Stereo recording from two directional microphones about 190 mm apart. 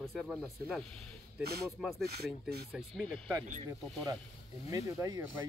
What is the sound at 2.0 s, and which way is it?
Speech, 55° right (ahead or behind).